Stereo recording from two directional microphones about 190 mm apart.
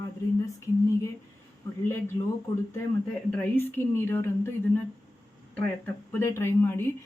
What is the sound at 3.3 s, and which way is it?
A woman's voice, 10° left (ahead or behind).